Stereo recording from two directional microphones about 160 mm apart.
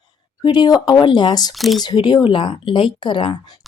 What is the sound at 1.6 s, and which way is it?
Speech, centre (ahead or behind).